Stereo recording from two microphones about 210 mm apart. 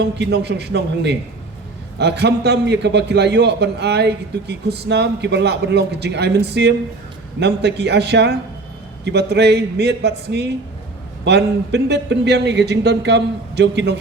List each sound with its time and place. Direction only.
0.0 s a man's voice: 55° right (ahead or behind)